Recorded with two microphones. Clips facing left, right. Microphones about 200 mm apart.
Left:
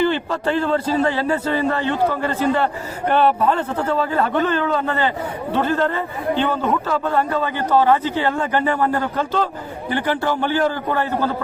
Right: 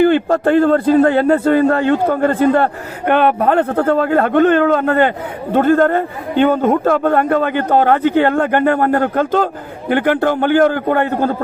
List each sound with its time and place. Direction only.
0.0 s a man's voice: 55° right (ahead or behind)